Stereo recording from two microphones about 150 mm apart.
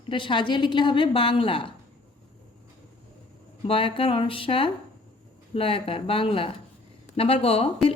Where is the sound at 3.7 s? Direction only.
35° left (ahead or behind).